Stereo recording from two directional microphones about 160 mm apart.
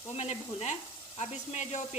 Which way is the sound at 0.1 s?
40° left (ahead or behind).